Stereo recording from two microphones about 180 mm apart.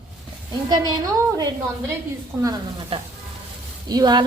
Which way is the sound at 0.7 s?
20° right (ahead or behind).